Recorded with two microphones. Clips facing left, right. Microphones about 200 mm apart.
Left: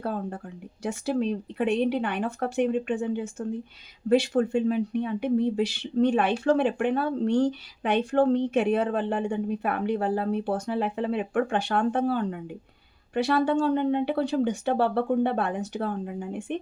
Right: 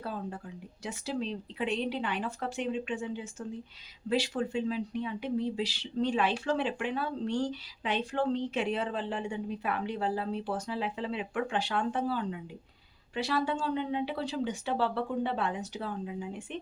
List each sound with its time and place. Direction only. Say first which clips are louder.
0.0 s a woman's voice: left 6 dB; 55° left (ahead or behind)